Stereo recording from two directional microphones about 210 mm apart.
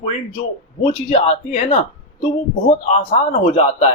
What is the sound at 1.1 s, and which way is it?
Speech, 35° left (ahead or behind).